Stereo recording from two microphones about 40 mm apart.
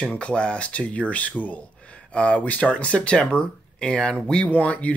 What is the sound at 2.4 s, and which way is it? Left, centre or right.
Speech, left.